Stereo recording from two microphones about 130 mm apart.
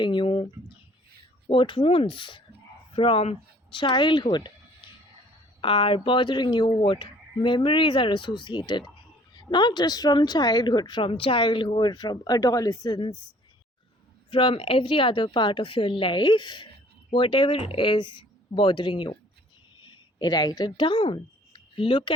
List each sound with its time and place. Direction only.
0.0 s speech: 40° left (ahead or behind)
1.5 s speech: 40° left (ahead or behind)
5.5 s speech: 45° left (ahead or behind); by 13.0 s 30° left (ahead or behind)
14.3 s speech: 40° left (ahead or behind)